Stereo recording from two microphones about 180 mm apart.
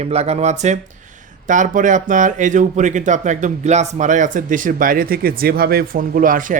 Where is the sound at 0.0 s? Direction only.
35° right (ahead or behind).